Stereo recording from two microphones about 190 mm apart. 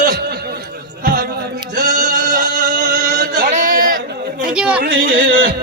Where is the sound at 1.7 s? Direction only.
45° right (ahead or behind).